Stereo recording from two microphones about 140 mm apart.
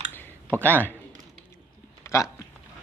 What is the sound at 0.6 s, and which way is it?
Speech, 10° left (ahead or behind).